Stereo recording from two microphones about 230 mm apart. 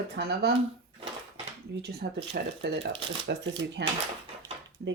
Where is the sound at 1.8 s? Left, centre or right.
Right.